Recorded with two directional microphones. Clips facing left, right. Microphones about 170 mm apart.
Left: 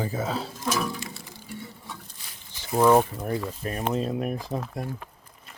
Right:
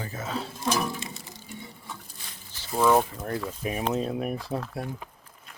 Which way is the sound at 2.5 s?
15° left (ahead or behind).